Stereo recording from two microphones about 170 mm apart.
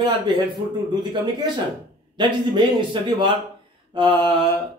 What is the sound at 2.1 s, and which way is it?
A man's voice, 25° right (ahead or behind).